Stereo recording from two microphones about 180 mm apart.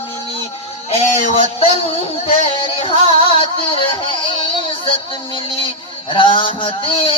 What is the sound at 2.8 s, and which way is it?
Music, 30° left (ahead or behind).